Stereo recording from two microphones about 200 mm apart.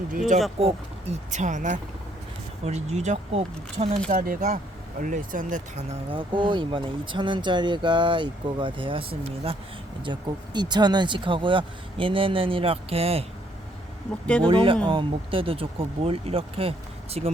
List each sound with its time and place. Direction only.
0.1 s speech: 40° right (ahead or behind)
4.1 s speech: 40° right (ahead or behind)
6.1 s speech: 25° right (ahead or behind)
14.4 s speech: 25° right (ahead or behind)